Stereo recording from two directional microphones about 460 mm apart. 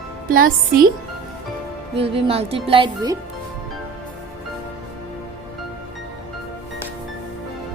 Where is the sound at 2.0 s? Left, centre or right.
Centre.